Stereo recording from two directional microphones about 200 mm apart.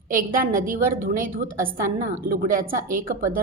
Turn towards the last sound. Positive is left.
turn(degrees=-45)  # may be behind; listen again after turning